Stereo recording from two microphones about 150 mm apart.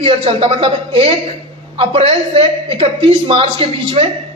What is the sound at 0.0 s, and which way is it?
A man's voice, 40° right (ahead or behind).